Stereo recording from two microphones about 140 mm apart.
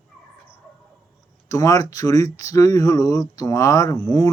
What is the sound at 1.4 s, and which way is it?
Speech, 25° left (ahead or behind).